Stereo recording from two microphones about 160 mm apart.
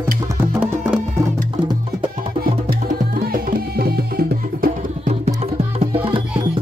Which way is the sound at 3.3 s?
70° right (ahead or behind).